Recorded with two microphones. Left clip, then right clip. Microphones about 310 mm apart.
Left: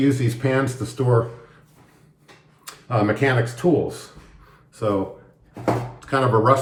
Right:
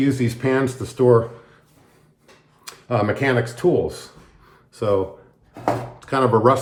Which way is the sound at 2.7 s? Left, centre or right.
Right.